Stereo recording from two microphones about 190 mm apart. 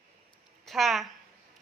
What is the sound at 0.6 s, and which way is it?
Speech, centre (ahead or behind).